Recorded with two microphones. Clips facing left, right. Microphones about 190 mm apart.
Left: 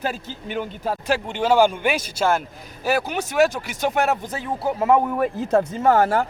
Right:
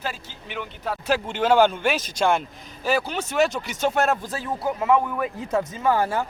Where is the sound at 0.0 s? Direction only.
45° left (ahead or behind).